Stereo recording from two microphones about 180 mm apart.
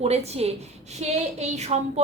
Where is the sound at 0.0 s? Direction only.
35° right (ahead or behind).